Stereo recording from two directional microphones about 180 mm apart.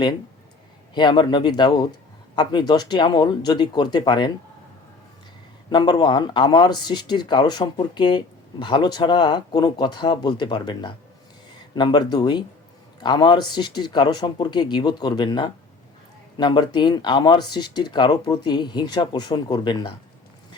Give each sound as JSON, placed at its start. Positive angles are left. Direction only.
{"t": 0.9, "sound": "speech", "side_deg": 25}
{"t": 5.7, "sound": "speech", "side_deg": 25}